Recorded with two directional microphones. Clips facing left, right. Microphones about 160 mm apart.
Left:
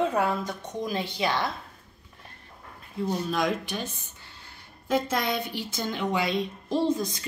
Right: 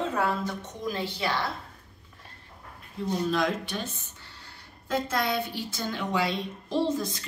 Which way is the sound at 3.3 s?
15° left (ahead or behind).